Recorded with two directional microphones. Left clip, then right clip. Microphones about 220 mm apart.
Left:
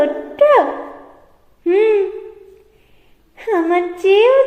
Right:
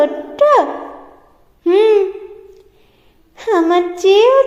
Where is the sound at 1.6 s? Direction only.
25° right (ahead or behind).